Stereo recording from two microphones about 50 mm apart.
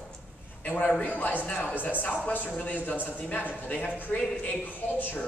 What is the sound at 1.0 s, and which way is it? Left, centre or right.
Speech, left.